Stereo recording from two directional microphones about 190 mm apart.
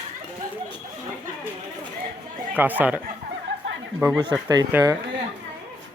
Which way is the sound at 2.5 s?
10° right (ahead or behind).